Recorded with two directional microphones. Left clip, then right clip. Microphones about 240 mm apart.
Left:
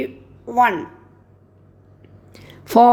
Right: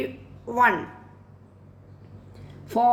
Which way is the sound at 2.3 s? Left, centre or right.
Left.